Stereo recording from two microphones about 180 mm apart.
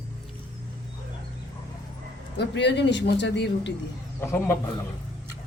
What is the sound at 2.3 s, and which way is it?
Speech, 75° left (ahead or behind).